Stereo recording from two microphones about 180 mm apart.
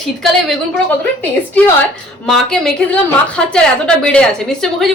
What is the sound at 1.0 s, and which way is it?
A woman's voice, 10° left (ahead or behind).